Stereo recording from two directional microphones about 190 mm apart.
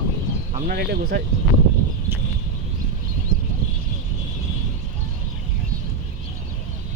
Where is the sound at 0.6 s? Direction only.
60° right (ahead or behind).